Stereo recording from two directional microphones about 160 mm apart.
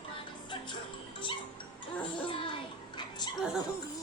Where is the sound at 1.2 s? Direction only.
30° left (ahead or behind).